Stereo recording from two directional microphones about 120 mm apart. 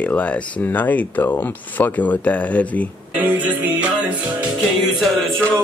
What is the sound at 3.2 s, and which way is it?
Music, 15° right (ahead or behind).